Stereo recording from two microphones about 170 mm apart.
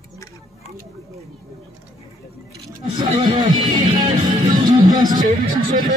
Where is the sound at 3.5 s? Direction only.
25° right (ahead or behind).